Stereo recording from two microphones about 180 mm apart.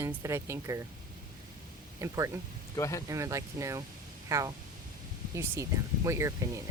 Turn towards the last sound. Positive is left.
turn(degrees=-15)  # may be behind; listen again after turning